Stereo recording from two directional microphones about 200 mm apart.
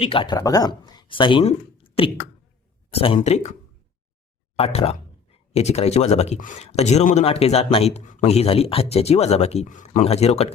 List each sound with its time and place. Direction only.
0.0 s speech: 25° left (ahead or behind)
4.5 s speech: 30° left (ahead or behind)